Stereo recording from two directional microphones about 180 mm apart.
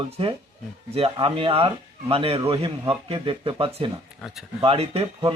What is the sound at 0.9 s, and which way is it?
Speech, 30° right (ahead or behind).